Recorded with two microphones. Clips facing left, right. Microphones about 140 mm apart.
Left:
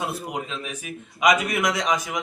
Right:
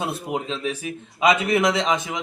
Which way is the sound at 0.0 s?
25° right (ahead or behind).